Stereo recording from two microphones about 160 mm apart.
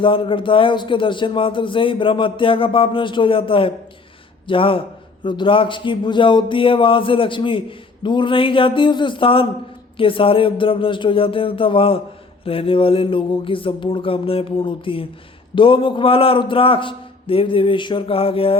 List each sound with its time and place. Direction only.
0.0 s speech: 35° left (ahead or behind)